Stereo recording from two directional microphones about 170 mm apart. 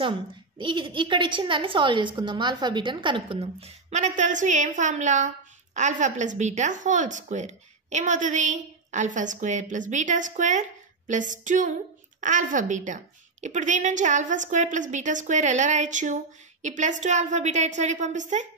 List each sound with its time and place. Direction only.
0.6 s a woman's voice: 30° right (ahead or behind); by 18.5 s 45° right (ahead or behind)